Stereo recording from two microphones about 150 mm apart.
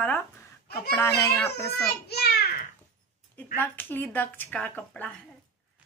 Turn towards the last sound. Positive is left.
turn(degrees=10)  # may be behind; listen again after turning